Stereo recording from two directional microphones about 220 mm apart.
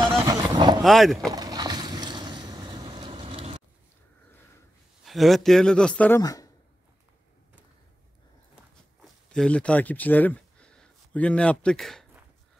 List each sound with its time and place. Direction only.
0.0 s vehicle: 15° right (ahead or behind)
0.8 s a man's voice: centre (ahead or behind)
1.3 s vehicle: 20° right (ahead or behind)
5.0 s a man's voice: centre (ahead or behind); by 6.5 s 15° left (ahead or behind)
9.0 s a sound: 5° left (ahead or behind)